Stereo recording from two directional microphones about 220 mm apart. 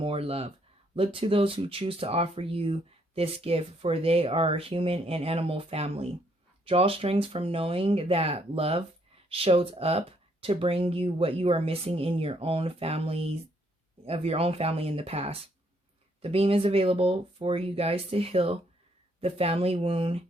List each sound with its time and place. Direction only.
0.0 s speech: 25° right (ahead or behind)